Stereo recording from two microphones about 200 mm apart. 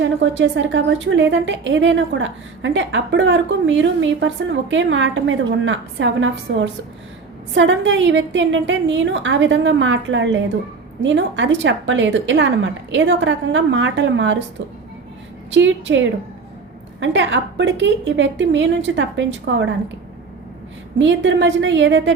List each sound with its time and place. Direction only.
0.0 s a woman's voice: 65° right (ahead or behind)
15.4 s a woman's voice: 65° right (ahead or behind)
21.0 s a woman's voice: 65° right (ahead or behind)